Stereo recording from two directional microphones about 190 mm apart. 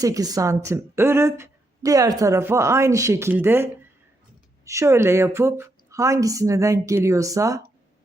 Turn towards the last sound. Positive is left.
turn(degrees=-15)  # may be behind; listen again after turning